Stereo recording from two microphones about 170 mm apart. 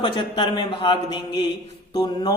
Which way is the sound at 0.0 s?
30° left (ahead or behind).